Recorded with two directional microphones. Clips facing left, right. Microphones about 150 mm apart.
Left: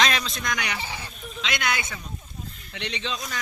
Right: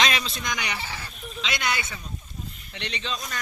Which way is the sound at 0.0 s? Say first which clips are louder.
Left 1 dB; 5° right (ahead or behind).